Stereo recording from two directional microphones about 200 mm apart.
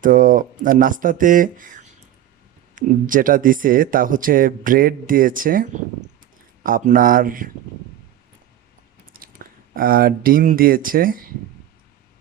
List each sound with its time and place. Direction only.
0.0 s speech: 45° right (ahead or behind)
9.1 s speech: 45° right (ahead or behind)